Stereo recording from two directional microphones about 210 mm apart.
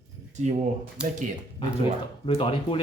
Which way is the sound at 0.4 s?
35° right (ahead or behind).